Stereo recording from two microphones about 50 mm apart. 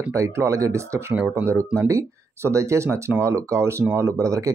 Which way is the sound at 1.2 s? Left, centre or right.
Right.